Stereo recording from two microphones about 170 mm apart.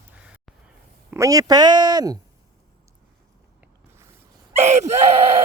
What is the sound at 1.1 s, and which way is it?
Speech, 20° right (ahead or behind).